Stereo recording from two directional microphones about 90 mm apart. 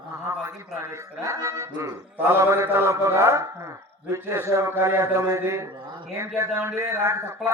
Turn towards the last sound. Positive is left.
turn(degrees=-35)  # may be behind; listen again after turning